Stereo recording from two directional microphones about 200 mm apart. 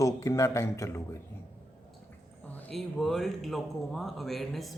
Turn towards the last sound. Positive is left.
turn(degrees=0)  # may be behind; listen again after turning